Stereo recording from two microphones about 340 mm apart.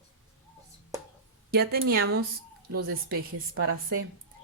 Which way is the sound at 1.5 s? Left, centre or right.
Right.